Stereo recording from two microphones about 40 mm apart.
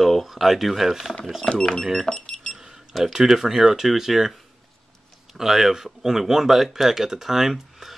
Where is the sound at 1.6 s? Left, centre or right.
Centre.